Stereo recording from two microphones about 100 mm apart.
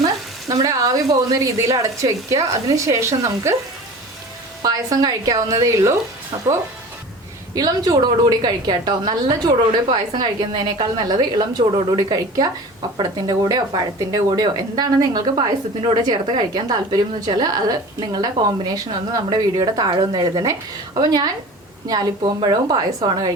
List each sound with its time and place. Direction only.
0.4 s a woman's voice: 35° right (ahead or behind)
4.6 s a woman's voice: 40° right (ahead or behind)
7.5 s a woman's voice: 40° right (ahead or behind); by 11.9 s 55° right (ahead or behind)
11.9 s a woman's voice: 40° right (ahead or behind)